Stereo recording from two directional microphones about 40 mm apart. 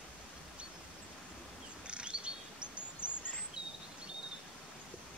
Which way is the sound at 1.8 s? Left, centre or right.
Right.